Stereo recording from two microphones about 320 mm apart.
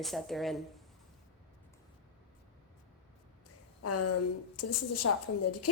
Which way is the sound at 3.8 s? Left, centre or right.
Left.